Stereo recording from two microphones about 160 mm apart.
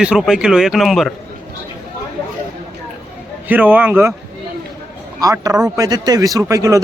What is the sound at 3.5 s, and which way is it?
Speech, 10° right (ahead or behind).